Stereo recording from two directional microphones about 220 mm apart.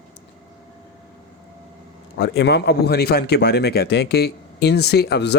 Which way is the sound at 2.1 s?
50° left (ahead or behind).